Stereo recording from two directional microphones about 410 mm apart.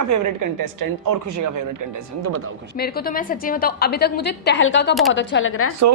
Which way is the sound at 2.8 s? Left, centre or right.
Left.